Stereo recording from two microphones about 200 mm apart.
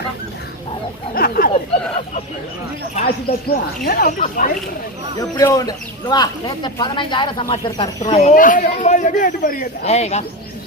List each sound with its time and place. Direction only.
1.1 s a sound: 45° left (ahead or behind)
3.1 s speech: 50° left (ahead or behind)
5.4 s speech: 15° left (ahead or behind)
8.0 s speech: 35° left (ahead or behind)
9.8 s speech: 35° left (ahead or behind)